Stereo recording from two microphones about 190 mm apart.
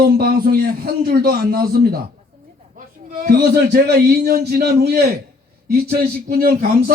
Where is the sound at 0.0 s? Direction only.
50° right (ahead or behind).